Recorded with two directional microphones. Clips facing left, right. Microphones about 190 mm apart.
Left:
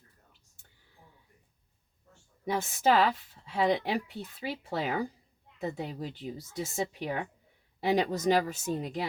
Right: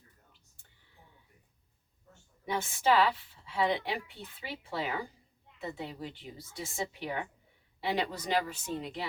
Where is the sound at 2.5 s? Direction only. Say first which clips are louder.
Left 2 dB; 40° left (ahead or behind).